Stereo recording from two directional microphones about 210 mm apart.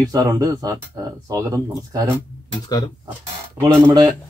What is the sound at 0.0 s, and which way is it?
Speech, 20° right (ahead or behind).